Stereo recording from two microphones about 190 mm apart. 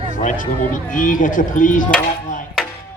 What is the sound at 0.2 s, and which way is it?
Speech, 45° left (ahead or behind).